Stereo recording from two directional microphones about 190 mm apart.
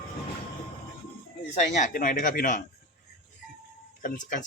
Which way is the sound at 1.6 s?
40° left (ahead or behind).